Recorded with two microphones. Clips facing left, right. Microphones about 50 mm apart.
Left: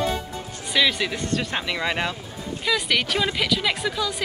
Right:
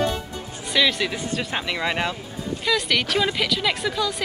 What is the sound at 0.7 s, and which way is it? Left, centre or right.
Speech, centre.